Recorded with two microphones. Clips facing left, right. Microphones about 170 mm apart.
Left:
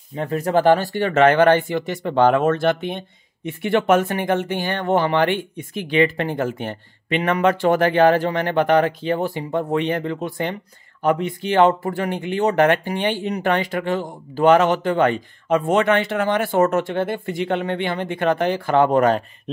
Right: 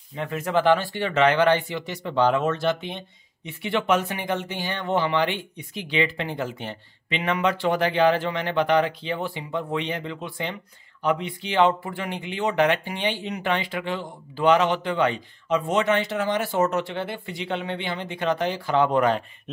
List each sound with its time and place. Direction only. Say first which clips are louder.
0.1 s speech: left 5 dB; 40° left (ahead or behind)